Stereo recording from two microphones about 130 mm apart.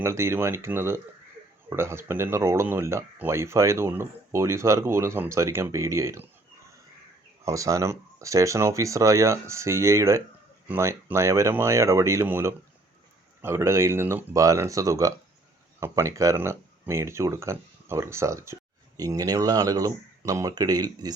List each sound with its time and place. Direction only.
0.0 s speech: 20° right (ahead or behind)
7.4 s speech: 25° right (ahead or behind)